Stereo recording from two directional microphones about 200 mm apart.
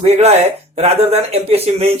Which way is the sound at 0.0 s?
30° right (ahead or behind).